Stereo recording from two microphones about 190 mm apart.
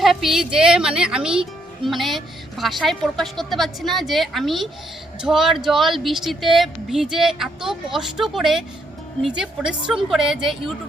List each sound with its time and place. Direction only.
0.0 s speech: centre (ahead or behind)